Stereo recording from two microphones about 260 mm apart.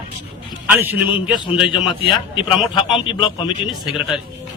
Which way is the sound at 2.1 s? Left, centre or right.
Centre.